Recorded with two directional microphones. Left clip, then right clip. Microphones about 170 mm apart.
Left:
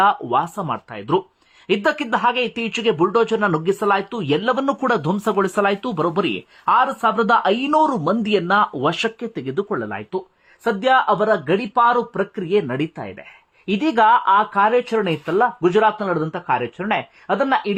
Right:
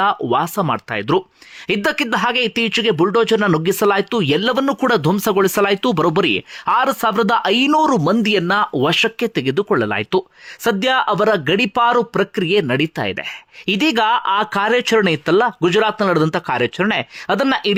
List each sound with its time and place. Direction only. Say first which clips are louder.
0.0 s speech: even; 25° right (ahead or behind)
8.2 s speech: right 1 dB; 20° right (ahead or behind)
13.0 s speech: right 10 dB; 35° right (ahead or behind)